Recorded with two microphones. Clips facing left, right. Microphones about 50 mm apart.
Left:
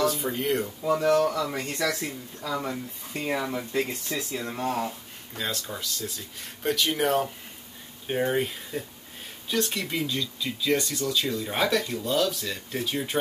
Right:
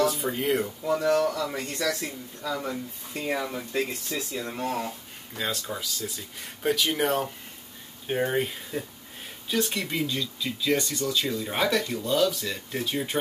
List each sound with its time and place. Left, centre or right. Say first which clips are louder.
0.0 s speech: right 1 dB; centre
1.4 s speech: left 1 dB; left
5.3 s speech: right 1 dB; centre